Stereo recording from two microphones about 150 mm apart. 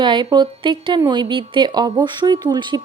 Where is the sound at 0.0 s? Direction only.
30° right (ahead or behind).